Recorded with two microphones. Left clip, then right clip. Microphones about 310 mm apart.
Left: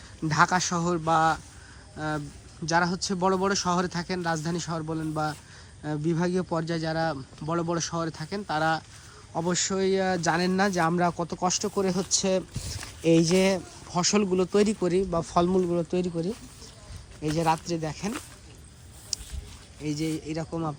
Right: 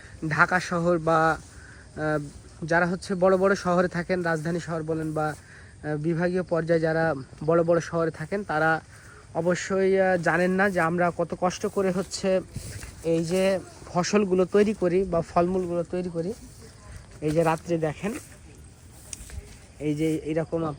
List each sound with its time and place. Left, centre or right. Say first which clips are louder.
0.3 s speech: right 1 dB; centre
2.6 s speech: right 1 dB; centre
17.3 s speech: right 2 dB; centre
19.8 s speech: right 5 dB; centre